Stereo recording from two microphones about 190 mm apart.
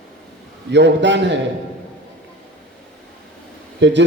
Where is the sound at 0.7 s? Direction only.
70° right (ahead or behind).